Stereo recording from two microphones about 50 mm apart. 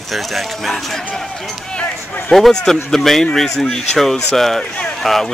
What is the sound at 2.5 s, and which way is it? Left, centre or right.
Speech, centre.